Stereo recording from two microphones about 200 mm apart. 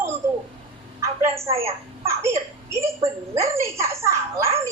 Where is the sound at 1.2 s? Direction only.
15° right (ahead or behind).